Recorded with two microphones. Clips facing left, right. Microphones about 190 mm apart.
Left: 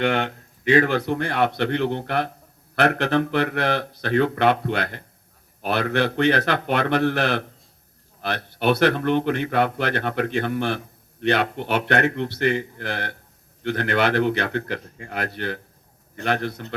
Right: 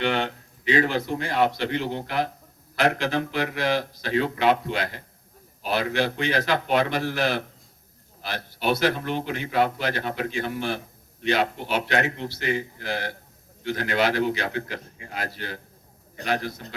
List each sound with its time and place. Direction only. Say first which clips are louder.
0.0 s speech: left 3 dB; 50° left (ahead or behind)